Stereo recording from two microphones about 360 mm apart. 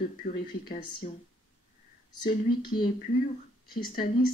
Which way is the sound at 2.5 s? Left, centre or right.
Centre.